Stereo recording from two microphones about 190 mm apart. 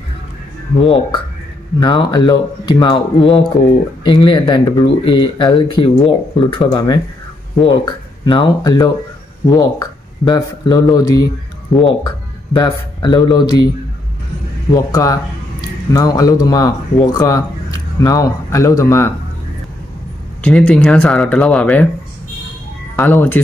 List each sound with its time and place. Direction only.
0.7 s speech: 30° left (ahead or behind)
14.7 s speech: 20° left (ahead or behind)
20.4 s speech: 5° left (ahead or behind)
22.9 s speech: 10° left (ahead or behind)